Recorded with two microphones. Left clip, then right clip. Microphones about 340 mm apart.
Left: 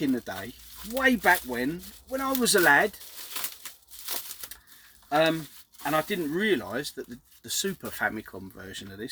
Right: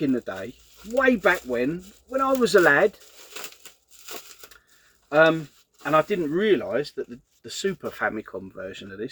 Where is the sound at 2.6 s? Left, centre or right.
Left.